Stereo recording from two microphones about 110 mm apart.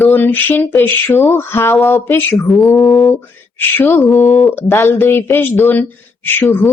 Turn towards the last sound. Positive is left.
turn(degrees=20)  # may be behind; listen again after turning